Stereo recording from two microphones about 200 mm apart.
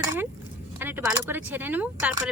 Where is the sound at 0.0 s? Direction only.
10° right (ahead or behind).